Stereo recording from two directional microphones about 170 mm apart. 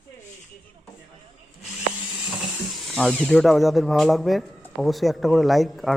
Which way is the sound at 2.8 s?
5° left (ahead or behind).